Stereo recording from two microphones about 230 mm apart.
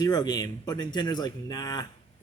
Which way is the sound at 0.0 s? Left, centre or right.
Centre.